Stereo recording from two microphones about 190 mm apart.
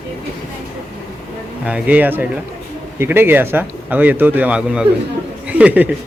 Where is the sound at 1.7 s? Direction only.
5° right (ahead or behind).